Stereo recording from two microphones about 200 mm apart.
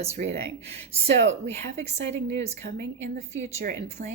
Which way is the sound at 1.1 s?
65° right (ahead or behind).